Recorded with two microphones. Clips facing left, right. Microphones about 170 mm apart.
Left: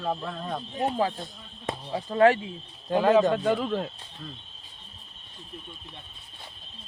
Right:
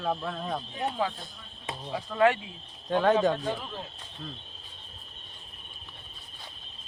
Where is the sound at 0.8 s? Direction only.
35° left (ahead or behind).